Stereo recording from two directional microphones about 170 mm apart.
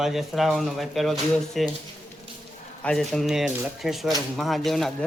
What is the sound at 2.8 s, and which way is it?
Speech, 5° left (ahead or behind).